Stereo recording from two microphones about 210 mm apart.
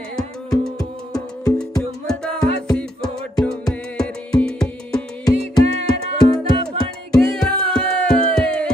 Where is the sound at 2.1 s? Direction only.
5° left (ahead or behind).